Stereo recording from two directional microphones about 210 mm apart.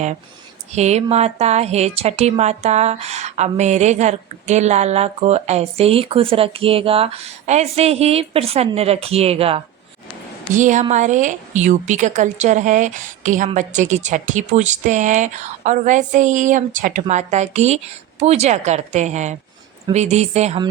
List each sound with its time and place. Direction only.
0.7 s a woman's voice: 30° right (ahead or behind)